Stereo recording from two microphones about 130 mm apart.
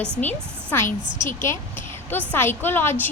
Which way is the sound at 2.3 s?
15° left (ahead or behind).